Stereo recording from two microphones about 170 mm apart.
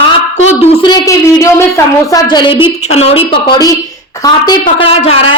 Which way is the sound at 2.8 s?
40° left (ahead or behind).